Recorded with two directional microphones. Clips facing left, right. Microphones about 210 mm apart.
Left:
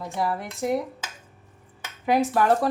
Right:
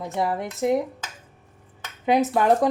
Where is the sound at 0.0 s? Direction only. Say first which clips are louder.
Right 2 dB; 20° right (ahead or behind).